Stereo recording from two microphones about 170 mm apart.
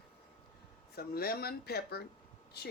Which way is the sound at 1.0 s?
65° left (ahead or behind).